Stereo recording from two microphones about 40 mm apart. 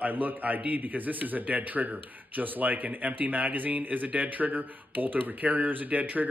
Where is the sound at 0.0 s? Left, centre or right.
Right.